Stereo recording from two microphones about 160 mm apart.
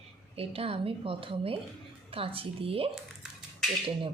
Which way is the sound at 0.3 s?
35° right (ahead or behind).